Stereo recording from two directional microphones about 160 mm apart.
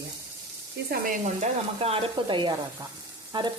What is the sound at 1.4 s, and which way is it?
Sizzle, 40° right (ahead or behind).